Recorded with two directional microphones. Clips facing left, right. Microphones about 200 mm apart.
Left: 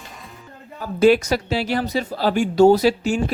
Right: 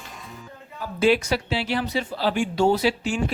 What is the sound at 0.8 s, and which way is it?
Speech, 45° left (ahead or behind).